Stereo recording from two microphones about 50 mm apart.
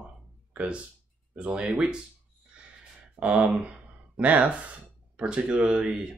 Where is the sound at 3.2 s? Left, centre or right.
Right.